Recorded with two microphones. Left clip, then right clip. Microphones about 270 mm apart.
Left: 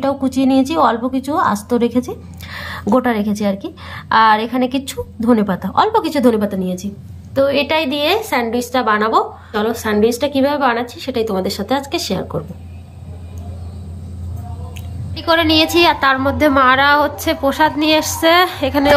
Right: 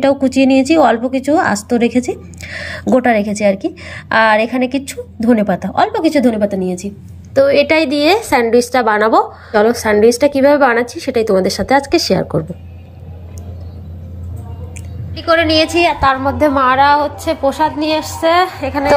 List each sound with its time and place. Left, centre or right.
0.0 s a woman's voice: centre
7.3 s a woman's voice: centre
15.1 s a woman's voice: centre
15.8 s a woman's voice: centre
16.5 s a woman's voice: centre